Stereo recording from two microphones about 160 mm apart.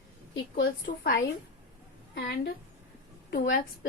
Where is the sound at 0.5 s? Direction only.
80° left.